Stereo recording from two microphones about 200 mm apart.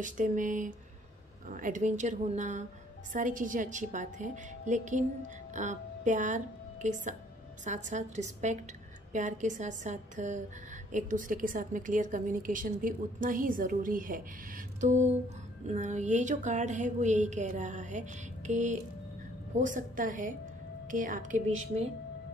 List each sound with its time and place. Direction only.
0.0 s a woman's voice: 40° right (ahead or behind)